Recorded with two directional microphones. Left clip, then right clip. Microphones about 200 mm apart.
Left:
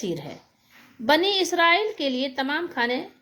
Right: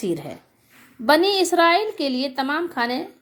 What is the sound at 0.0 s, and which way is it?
A woman's voice, 20° right (ahead or behind).